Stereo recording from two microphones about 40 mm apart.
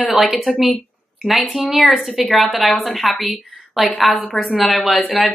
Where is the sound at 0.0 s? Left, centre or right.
Centre.